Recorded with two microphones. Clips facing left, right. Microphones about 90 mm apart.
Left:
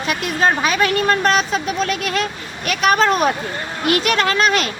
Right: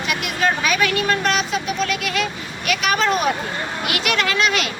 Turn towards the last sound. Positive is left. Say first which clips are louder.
# left 3 dB
turn(degrees=40)  # may be behind; listen again after turning